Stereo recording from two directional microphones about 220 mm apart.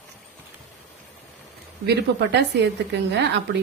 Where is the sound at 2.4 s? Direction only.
50° right (ahead or behind).